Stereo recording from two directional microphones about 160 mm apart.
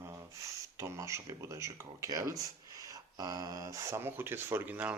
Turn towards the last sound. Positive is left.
turn(degrees=-10)  # may be behind; listen again after turning